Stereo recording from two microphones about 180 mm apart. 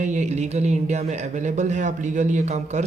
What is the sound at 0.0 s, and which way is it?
Speech, 40° right (ahead or behind).